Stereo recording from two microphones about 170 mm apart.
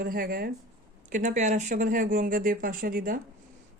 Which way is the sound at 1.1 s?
50° right (ahead or behind).